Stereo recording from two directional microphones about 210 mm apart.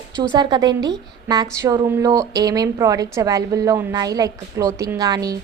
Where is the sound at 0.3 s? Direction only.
20° right (ahead or behind).